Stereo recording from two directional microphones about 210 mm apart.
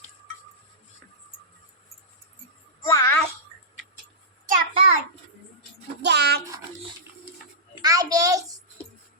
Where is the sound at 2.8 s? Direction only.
15° left (ahead or behind).